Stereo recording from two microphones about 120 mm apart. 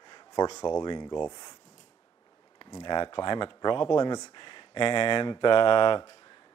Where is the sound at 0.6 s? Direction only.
35° left (ahead or behind).